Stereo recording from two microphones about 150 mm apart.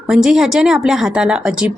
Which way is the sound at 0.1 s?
5° right (ahead or behind).